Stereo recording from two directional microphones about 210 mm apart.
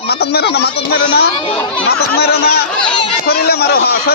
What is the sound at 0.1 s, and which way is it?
Speech, 50° left (ahead or behind).